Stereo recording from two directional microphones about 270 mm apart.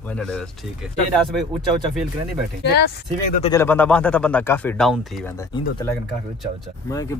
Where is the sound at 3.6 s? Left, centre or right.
Centre.